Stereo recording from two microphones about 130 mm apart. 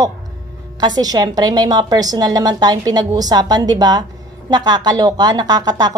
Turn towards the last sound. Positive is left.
turn(degrees=-30)  # may be behind; listen again after turning